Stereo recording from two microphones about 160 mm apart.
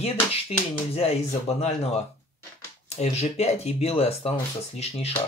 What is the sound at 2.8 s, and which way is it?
Speech, 40° left (ahead or behind).